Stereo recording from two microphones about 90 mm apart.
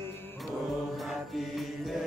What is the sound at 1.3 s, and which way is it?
Mantra, centre (ahead or behind).